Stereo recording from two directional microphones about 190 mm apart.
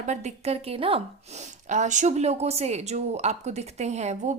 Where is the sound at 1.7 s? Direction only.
40° right (ahead or behind).